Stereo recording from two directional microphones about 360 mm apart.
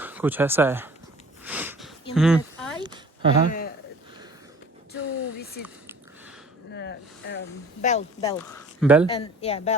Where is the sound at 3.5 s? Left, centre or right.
Left.